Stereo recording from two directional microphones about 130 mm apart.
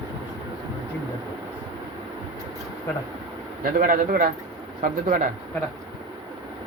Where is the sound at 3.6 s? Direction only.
90° right.